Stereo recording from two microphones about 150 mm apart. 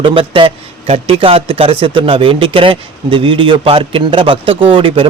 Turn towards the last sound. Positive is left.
turn(degrees=-35)  # may be behind; listen again after turning